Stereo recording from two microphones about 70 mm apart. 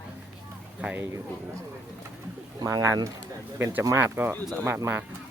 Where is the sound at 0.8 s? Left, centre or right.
Right.